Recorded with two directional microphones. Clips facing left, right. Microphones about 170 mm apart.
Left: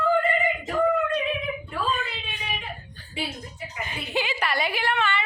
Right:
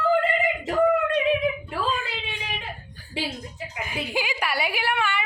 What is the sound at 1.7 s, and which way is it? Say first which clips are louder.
Whimper: right 1 dB; 90° right.